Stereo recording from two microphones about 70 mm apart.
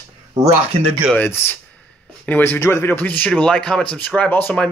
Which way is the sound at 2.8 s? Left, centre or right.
Left.